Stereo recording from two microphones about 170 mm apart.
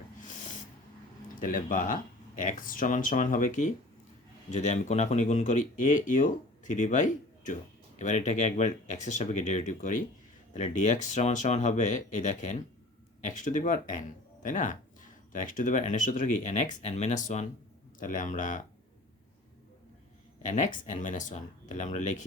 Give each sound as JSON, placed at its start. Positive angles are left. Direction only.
{"t": 0.2, "sound": "snort", "side_deg": 45}
{"t": 1.4, "sound": "speech", "side_deg": 50}
{"t": 20.5, "sound": "speech", "side_deg": 45}